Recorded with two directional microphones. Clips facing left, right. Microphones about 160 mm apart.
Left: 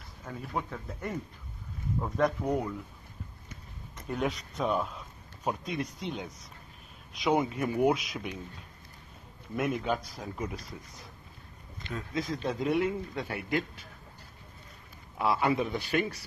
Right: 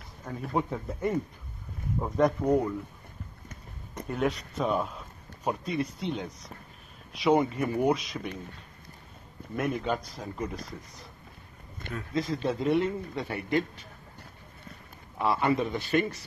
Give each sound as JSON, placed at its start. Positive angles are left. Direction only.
{"t": 0.5, "sound": "a man's voice", "side_deg": -15}
{"t": 4.1, "sound": "a man's voice", "side_deg": 0}
{"t": 9.6, "sound": "a man's voice", "side_deg": 0}
{"t": 12.1, "sound": "a man's voice", "side_deg": 0}
{"t": 15.1, "sound": "a man's voice", "side_deg": 5}